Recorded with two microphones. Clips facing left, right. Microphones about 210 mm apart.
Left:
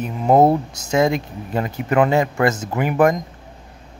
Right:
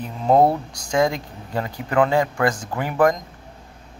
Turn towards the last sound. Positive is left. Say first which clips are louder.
# left 2 dB
turn(degrees=20)  # may be behind; listen again after turning